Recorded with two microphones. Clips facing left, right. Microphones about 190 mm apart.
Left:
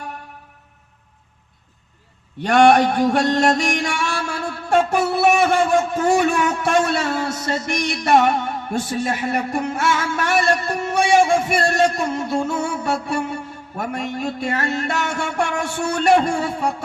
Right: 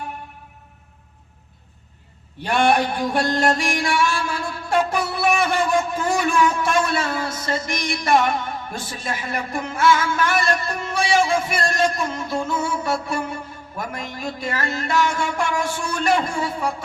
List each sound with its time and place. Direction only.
2.5 s music: 70° left (ahead or behind)